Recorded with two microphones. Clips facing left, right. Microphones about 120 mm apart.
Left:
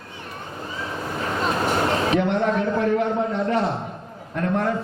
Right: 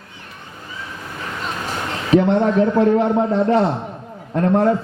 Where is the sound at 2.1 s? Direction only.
35° right (ahead or behind).